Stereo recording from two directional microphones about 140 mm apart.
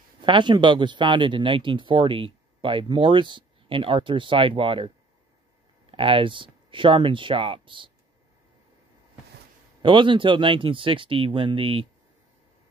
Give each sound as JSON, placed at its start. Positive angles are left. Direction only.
{"t": 0.2, "sound": "speech", "side_deg": -35}
{"t": 9.8, "sound": "speech", "side_deg": -35}